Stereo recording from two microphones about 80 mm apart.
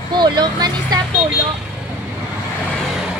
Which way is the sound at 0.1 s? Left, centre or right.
Right.